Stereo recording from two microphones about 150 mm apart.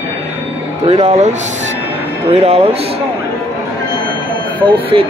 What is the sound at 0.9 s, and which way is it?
Speech, 45° right (ahead or behind).